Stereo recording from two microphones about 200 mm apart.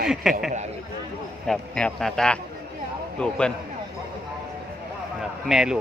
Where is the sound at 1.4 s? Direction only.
5° left (ahead or behind).